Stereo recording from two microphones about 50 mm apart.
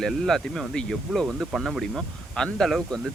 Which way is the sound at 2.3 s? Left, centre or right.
Centre.